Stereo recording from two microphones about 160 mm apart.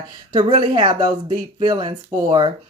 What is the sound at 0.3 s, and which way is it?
A woman's voice, 35° right (ahead or behind).